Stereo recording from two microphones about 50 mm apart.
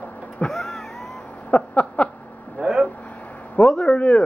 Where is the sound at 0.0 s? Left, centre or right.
Left.